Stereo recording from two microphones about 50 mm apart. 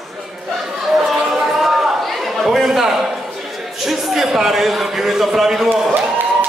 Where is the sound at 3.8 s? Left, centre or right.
Centre.